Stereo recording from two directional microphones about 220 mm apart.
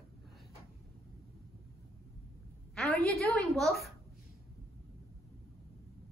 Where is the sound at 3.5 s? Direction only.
Centre (ahead or behind).